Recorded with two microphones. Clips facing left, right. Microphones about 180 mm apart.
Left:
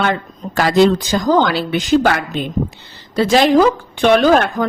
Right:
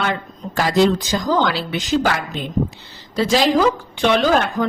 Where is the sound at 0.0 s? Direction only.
60° left (ahead or behind).